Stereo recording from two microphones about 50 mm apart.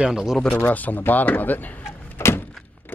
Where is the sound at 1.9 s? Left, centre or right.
Left.